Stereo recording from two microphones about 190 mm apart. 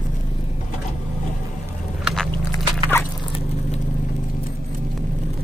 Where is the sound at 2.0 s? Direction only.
Centre (ahead or behind).